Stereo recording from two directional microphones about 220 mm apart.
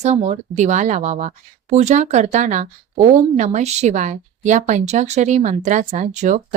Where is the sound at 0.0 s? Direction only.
30° right (ahead or behind).